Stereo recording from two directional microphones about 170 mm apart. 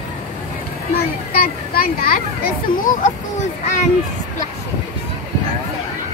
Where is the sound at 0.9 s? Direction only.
60° left (ahead or behind).